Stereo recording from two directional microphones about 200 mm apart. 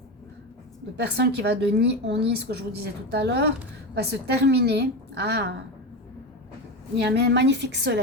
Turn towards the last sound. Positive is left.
turn(degrees=-60)  # may be behind; listen again after turning